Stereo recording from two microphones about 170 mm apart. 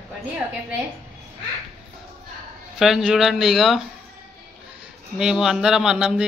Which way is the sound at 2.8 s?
Centre (ahead or behind).